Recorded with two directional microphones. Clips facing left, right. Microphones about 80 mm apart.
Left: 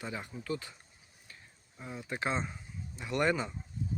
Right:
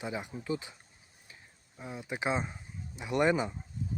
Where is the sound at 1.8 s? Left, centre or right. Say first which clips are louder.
Right 1 dB; centre.